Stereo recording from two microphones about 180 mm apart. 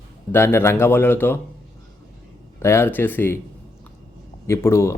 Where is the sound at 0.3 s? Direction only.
10° left (ahead or behind).